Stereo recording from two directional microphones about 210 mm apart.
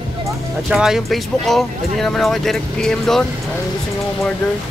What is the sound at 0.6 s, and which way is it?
Speech, centre (ahead or behind).